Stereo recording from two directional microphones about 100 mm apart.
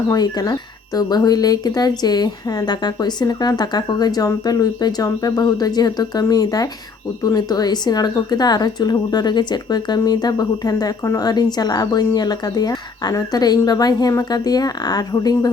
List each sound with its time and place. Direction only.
0.1 s a woman's voice: 40° left (ahead or behind)